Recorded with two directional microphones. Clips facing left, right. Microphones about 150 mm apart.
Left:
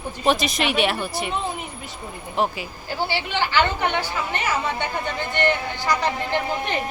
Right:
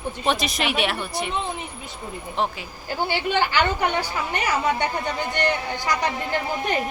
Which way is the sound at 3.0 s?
50° right (ahead or behind).